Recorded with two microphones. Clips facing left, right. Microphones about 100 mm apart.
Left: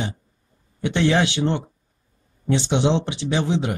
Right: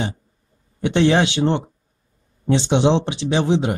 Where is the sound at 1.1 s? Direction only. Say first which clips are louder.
Right 3 dB; 20° right (ahead or behind).